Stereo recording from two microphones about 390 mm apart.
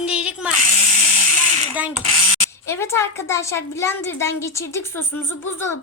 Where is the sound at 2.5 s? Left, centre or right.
Centre.